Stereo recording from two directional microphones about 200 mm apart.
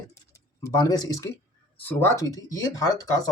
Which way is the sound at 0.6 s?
20° left (ahead or behind).